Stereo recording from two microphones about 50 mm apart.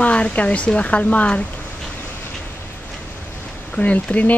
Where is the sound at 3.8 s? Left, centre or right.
Left.